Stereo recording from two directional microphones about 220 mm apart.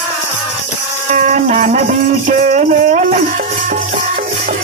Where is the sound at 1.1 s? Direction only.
35° right (ahead or behind).